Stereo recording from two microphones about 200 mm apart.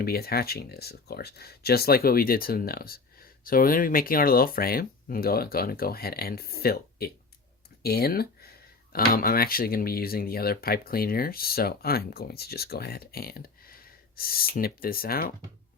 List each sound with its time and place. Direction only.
0.0 s speech: 50° left (ahead or behind)